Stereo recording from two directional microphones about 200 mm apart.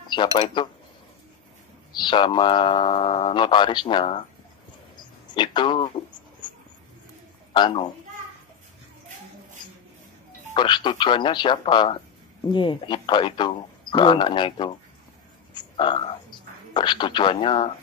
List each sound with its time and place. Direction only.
0.1 s a man's voice: 25° left (ahead or behind)
1.9 s a man's voice: 20° left (ahead or behind)
5.3 s a sound: 25° left (ahead or behind)
7.5 s a man's voice: 20° left (ahead or behind)
10.5 s a man's voice: 25° left (ahead or behind)